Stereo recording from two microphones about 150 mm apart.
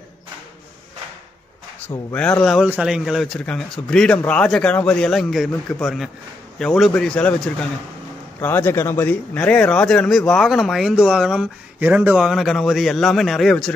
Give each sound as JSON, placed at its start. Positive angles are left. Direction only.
{"t": 1.9, "sound": "speech", "side_deg": 25}
{"t": 2.4, "sound": "speech", "side_deg": 0}
{"t": 6.6, "sound": "speech", "side_deg": 0}